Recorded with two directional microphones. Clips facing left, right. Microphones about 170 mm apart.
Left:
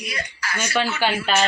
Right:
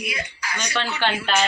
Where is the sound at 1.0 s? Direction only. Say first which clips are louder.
Left 1 dB; 5° left (ahead or behind).